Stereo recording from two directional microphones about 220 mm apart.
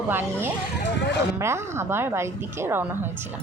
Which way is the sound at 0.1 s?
10° right (ahead or behind).